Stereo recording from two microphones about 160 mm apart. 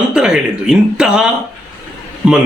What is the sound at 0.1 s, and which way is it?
A man's voice, 5° right (ahead or behind).